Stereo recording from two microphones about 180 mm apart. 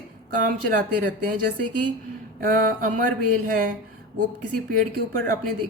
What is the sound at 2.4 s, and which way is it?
Speech, 50° right (ahead or behind).